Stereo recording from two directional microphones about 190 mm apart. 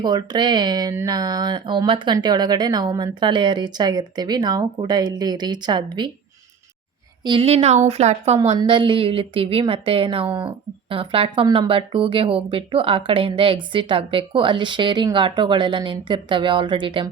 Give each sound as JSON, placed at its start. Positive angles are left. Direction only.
{"t": 0.0, "sound": "a woman's voice", "side_deg": -20}
{"t": 7.3, "sound": "a woman's voice", "side_deg": -30}